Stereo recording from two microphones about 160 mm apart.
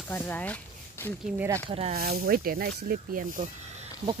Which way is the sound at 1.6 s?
40° right (ahead or behind).